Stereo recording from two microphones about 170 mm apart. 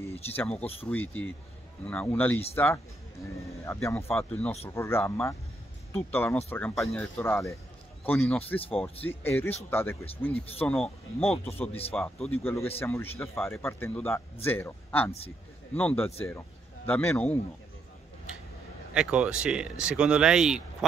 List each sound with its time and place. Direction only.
0.3 s speech: 10° left (ahead or behind)
6.7 s speech: centre (ahead or behind)
7.0 s speech: 15° left (ahead or behind)
10.3 s speech: 35° left (ahead or behind)
11.9 s a man's voice: 5° left (ahead or behind)
18.9 s speech: 5° right (ahead or behind)